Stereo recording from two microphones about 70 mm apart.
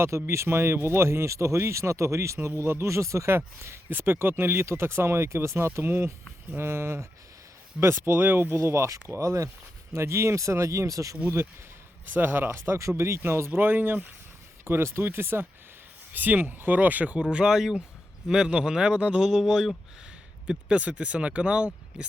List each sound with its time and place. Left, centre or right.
0.0 s speech: right
12.1 s speech: right
14.6 s speech: right
17.3 s speech: centre
20.5 s speech: centre